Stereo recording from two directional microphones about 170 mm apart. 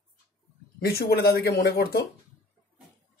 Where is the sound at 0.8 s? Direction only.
65° left (ahead or behind).